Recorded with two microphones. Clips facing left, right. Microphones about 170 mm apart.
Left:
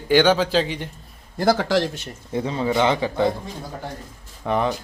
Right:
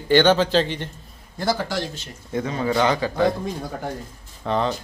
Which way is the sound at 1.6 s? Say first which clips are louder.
Left 6 dB; 90° left.